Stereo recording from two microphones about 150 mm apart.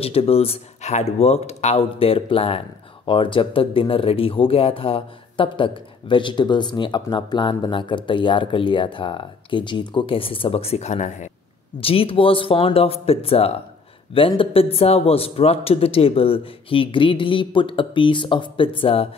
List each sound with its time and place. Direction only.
0.0 s speech: 40° left (ahead or behind)
11.8 s speech: 40° left (ahead or behind)